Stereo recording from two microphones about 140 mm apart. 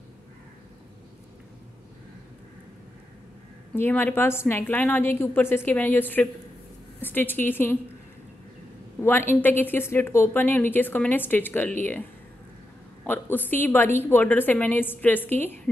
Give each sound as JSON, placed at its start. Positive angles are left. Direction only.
{"t": 3.7, "sound": "a woman's voice", "side_deg": 15}
{"t": 9.0, "sound": "a woman's voice", "side_deg": 15}